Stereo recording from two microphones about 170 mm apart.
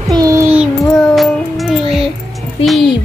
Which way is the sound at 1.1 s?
Centre (ahead or behind).